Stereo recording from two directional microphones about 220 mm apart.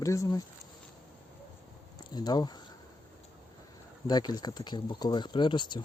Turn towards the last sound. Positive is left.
turn(degrees=20)  # may be behind; listen again after turning